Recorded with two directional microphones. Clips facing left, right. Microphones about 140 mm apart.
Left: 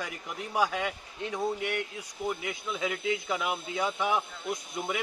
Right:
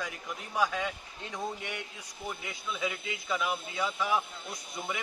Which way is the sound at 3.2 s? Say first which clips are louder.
Left 1 dB; 20° left (ahead or behind).